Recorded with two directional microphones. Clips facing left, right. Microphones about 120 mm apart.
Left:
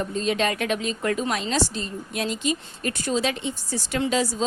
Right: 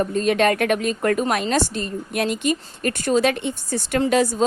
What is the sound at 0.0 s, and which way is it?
A woman's voice, 55° right (ahead or behind).